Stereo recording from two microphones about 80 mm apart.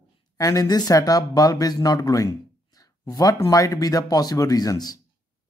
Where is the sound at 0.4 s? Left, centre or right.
Left.